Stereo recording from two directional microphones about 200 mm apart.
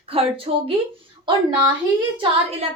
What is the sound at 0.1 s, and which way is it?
Speech, 30° right (ahead or behind).